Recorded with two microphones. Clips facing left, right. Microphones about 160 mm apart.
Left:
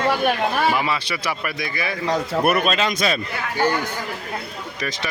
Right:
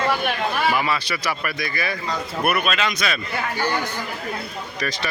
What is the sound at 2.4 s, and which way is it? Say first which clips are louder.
Speech: left 1 dB; 40° left (ahead or behind).